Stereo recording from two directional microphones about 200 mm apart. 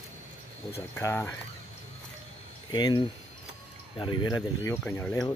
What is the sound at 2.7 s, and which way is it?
Speech, 20° left (ahead or behind).